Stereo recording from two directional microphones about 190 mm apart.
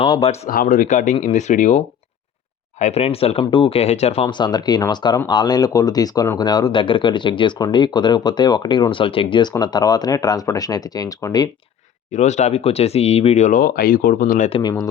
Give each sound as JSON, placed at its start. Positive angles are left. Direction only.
{"t": 0.2, "sound": "speech", "side_deg": 35}
{"t": 0.5, "sound": "speech", "side_deg": 50}
{"t": 12.1, "sound": "speech", "side_deg": 40}
{"t": 14.5, "sound": "speech", "side_deg": 20}